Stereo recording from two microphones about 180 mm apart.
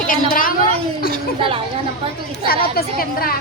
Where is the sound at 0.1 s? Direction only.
50° left (ahead or behind).